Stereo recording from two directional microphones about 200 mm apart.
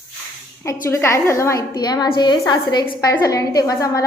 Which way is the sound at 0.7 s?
15° left (ahead or behind).